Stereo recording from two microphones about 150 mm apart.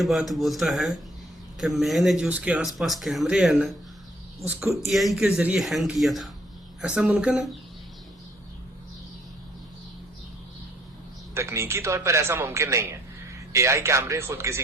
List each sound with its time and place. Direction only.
0.0 s speech: centre (ahead or behind)
11.3 s speech: 20° right (ahead or behind)